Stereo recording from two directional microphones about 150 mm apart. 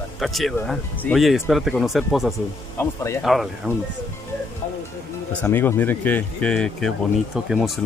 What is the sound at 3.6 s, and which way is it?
Speech, 10° right (ahead or behind).